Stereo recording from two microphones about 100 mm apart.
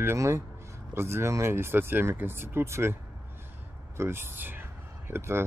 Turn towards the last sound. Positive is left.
turn(degrees=-25)  # may be behind; listen again after turning